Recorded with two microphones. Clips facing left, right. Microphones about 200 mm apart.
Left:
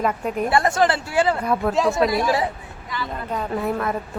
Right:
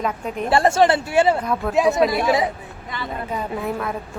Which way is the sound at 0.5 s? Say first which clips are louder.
Right 5 dB; 25° right (ahead or behind).